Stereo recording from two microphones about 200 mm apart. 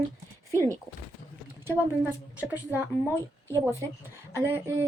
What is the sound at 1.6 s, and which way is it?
Speech, 10° right (ahead or behind).